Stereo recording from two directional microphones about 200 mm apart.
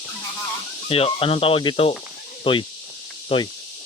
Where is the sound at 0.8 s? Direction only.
30° left (ahead or behind).